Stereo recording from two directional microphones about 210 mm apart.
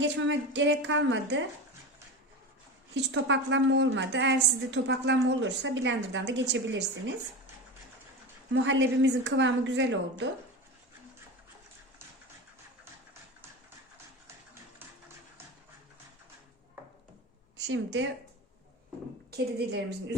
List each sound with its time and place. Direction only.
0.0 s a woman's voice: 60° right (ahead or behind)
2.9 s a woman's voice: 60° right (ahead or behind)
8.6 s a woman's voice: 60° right (ahead or behind)
17.6 s a woman's voice: 55° right (ahead or behind)
19.3 s a woman's voice: 50° right (ahead or behind)